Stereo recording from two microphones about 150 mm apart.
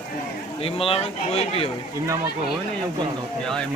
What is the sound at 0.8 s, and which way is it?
Speech, 40° left (ahead or behind).